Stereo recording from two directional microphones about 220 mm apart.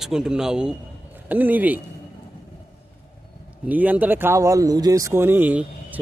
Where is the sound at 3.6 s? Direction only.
5° right (ahead or behind).